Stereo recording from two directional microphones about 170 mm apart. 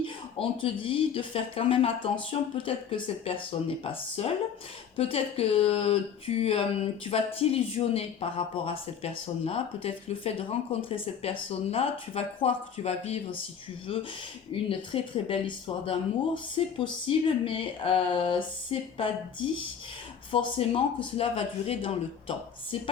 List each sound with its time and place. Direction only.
0.0 s speech: 30° left (ahead or behind)